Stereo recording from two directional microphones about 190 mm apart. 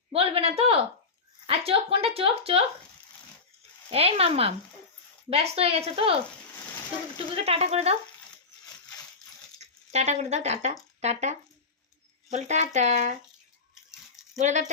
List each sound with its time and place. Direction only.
0.1 s a woman's voice: 30° right (ahead or behind)
3.8 s speech: 30° right (ahead or behind)
7.3 s speech: 30° right (ahead or behind)
9.6 s speech: 35° right (ahead or behind)
14.3 s speech: 40° right (ahead or behind)